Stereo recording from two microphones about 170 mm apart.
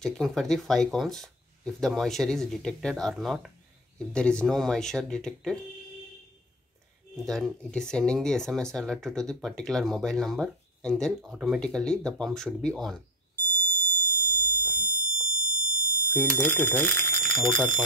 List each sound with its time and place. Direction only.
0.0 s speech: centre (ahead or behind)
7.2 s speech: centre (ahead or behind)
13.8 s buzzer: 15° left (ahead or behind)
14.8 s fire alarm: 20° left (ahead or behind)
16.3 s speech: 15° left (ahead or behind)
16.7 s speech: centre (ahead or behind)